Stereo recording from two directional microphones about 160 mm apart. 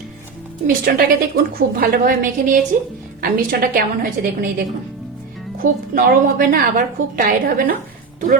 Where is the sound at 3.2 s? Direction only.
70° right (ahead or behind).